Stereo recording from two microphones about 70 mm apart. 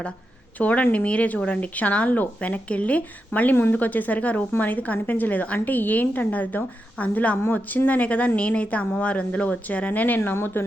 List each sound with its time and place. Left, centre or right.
0.6 s a woman's voice: left